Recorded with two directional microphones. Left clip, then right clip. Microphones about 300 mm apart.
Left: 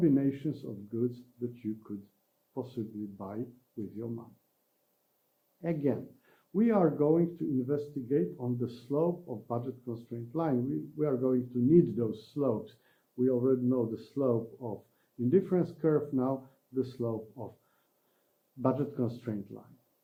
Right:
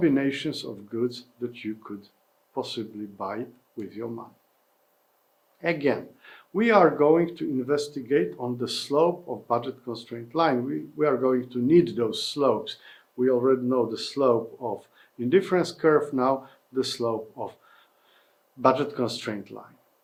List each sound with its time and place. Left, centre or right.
0.0 s speech: centre
5.5 s speech: centre
8.6 s speech: centre
9.1 s speech: right
9.5 s speech: centre
15.2 s speech: centre
17.0 s speech: centre
18.6 s speech: centre